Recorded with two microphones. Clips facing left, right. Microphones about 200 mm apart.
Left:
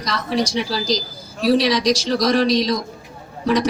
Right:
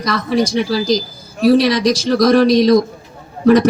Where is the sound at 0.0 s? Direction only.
55° right (ahead or behind).